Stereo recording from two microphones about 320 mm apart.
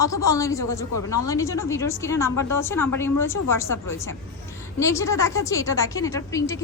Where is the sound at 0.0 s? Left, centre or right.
Centre.